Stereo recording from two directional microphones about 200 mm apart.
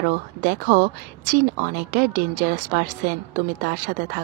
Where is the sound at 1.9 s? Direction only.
45° right (ahead or behind).